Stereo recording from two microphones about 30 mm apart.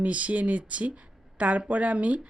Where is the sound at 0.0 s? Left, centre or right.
Right.